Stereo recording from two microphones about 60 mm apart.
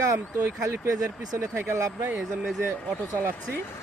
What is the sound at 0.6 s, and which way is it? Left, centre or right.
Speech, right.